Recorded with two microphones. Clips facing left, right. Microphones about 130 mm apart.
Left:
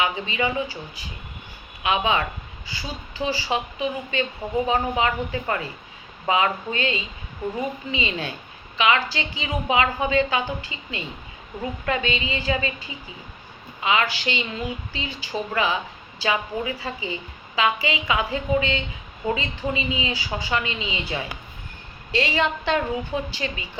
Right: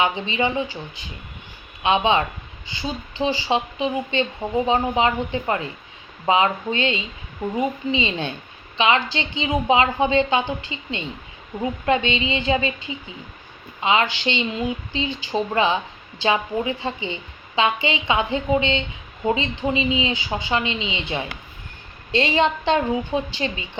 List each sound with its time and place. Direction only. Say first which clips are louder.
0.0 s a woman's voice: right 3 dB; 25° right (ahead or behind)